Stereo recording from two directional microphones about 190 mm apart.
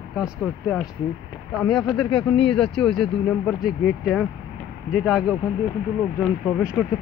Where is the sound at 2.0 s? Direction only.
30° left (ahead or behind).